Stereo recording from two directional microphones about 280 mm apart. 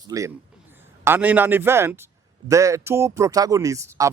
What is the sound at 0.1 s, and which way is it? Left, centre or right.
A man's voice, centre.